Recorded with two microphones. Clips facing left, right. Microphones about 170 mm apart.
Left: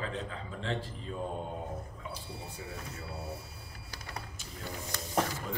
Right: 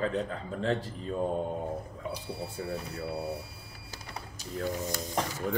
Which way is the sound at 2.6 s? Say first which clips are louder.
Right 10 dB; 50° right (ahead or behind).